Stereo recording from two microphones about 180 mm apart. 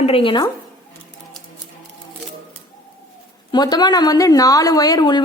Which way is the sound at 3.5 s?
25° left (ahead or behind).